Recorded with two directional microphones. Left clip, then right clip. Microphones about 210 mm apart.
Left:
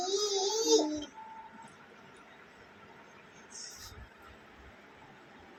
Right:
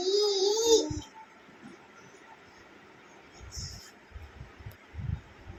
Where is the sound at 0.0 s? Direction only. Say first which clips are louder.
Right 5 dB; 20° right (ahead or behind).